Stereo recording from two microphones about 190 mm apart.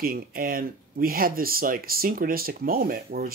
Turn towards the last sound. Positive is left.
turn(degrees=-50)  # may be behind; listen again after turning